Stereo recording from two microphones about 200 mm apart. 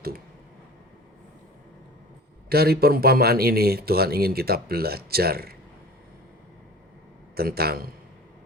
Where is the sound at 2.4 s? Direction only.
50° right (ahead or behind).